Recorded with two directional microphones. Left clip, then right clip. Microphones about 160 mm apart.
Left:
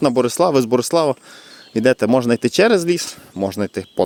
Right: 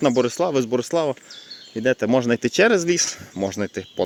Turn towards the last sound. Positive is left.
turn(degrees=30)  # may be behind; listen again after turning